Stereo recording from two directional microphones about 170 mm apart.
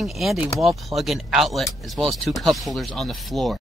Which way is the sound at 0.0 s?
Centre (ahead or behind).